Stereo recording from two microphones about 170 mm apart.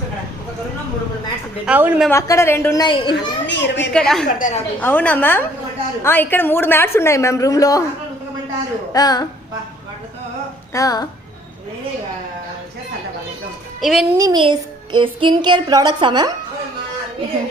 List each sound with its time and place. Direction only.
1.6 s a woman's voice: 10° right (ahead or behind)
2.0 s a woman's voice: 15° left (ahead or behind)
2.8 s a child's voice: 25° left (ahead or behind)
3.4 s a child's voice: 90° left
3.9 s a woman's voice: 5° left (ahead or behind)
4.3 s a woman's voice: 50° left (ahead or behind)
4.8 s a woman's voice: 10° left (ahead or behind)
8.9 s a child's voice: 20° left (ahead or behind)
10.8 s a child's voice: 20° left (ahead or behind)
13.8 s a woman's voice: centre (ahead or behind)
14.2 s a woman's voice: 25° right (ahead or behind)